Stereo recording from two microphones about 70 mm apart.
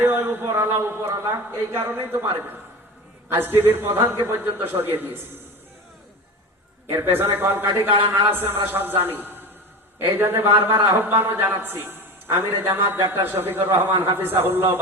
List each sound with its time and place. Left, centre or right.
0.0 s a man's voice: right
6.9 s a man's voice: right